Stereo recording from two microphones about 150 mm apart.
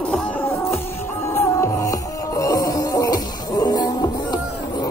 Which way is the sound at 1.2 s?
20° left (ahead or behind).